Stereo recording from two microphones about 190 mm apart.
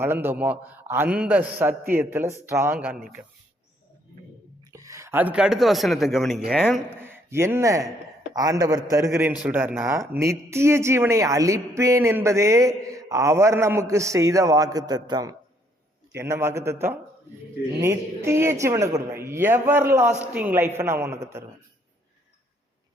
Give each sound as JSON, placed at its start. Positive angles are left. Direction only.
{"t": 0.0, "sound": "speech", "side_deg": -10}
{"t": 4.7, "sound": "a man's voice", "side_deg": -15}
{"t": 7.1, "sound": "a man's voice", "side_deg": -15}